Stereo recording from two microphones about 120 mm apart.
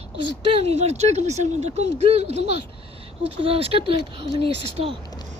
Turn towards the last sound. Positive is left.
turn(degrees=-50)  # may be behind; listen again after turning